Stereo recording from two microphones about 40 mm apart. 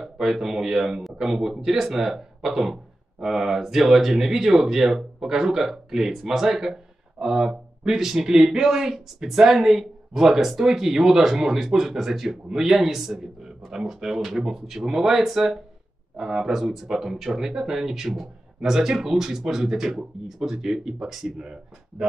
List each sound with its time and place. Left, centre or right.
0.0 s speech: centre
21.4 s speech: centre